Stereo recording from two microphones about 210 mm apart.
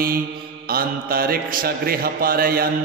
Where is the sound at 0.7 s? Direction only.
45° right (ahead or behind).